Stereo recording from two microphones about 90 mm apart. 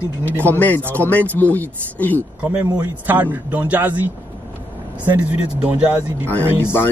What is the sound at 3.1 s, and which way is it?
Speech, 20° right (ahead or behind).